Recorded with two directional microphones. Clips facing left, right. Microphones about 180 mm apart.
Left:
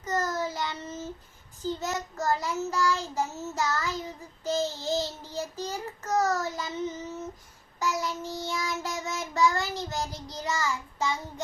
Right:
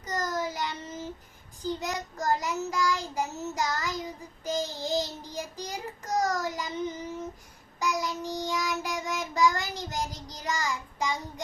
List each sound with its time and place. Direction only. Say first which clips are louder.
0.0 s child singing: left 2 dB; 15° right (ahead or behind)
1.6 s a child's voice: left 1 dB; 15° right (ahead or behind)